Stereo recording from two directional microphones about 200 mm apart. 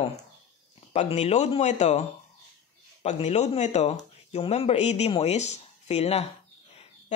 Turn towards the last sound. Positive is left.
turn(degrees=30)  # may be behind; listen again after turning